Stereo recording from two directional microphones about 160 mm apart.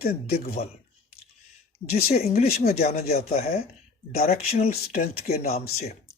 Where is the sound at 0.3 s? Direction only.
70° left (ahead or behind).